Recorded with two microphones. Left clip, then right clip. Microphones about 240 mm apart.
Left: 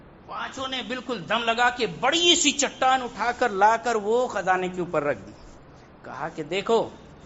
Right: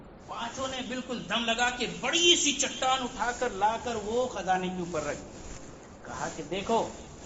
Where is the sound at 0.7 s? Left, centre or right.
Left.